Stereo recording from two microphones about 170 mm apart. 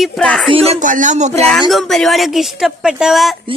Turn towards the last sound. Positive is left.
turn(degrees=0)  # may be behind; listen again after turning